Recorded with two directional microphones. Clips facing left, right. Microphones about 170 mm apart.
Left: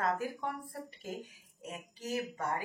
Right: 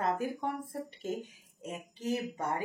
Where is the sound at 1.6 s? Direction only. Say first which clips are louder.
Right 4 dB; 20° right (ahead or behind).